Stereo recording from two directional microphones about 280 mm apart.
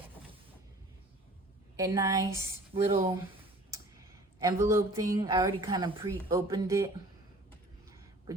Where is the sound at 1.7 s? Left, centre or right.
Centre.